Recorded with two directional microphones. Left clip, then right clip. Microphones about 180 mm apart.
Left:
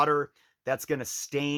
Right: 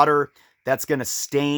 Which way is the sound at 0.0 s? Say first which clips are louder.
Right 7 dB; 50° right (ahead or behind).